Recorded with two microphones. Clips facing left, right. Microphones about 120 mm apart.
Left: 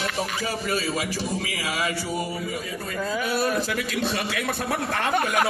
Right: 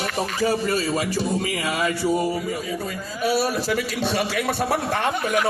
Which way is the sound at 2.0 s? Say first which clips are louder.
Right 7 dB; 25° right (ahead or behind).